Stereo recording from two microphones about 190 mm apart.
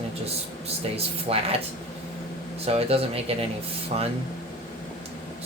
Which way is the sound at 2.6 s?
30° right (ahead or behind).